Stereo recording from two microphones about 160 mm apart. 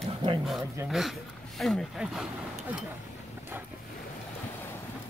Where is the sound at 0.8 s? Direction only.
Centre (ahead or behind).